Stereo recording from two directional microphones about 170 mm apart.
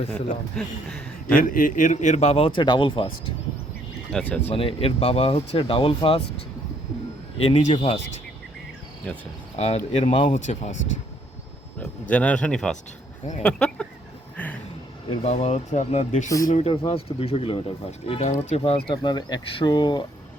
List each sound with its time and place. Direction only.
0.5 s speech: 5° left (ahead or behind)
1.4 s speech: 55° left (ahead or behind); by 3.1 s 30° left (ahead or behind)
4.1 s speech: 10° left (ahead or behind)
4.5 s speech: 35° left (ahead or behind)
7.4 s speech: 35° left (ahead or behind)
9.1 s speech: 5° left (ahead or behind)
9.6 s speech: 40° left (ahead or behind)
11.8 s speech: 10° left (ahead or behind)
14.3 s a sound: 10° left (ahead or behind)
15.1 s speech: 35° left (ahead or behind)
16.2 s speech: 20° left (ahead or behind)
16.5 s speech: 40° left (ahead or behind)